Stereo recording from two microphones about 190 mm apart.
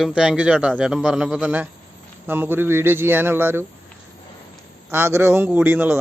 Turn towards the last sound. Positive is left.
turn(degrees=-10)  # may be behind; listen again after turning